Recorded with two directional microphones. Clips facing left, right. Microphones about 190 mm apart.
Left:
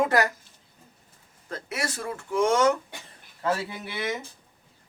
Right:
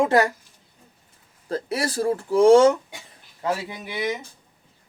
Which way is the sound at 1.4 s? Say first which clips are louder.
Right 7 dB; 35° right (ahead or behind).